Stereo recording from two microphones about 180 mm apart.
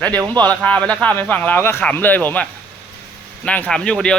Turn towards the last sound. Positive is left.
turn(degrees=5)  # may be behind; listen again after turning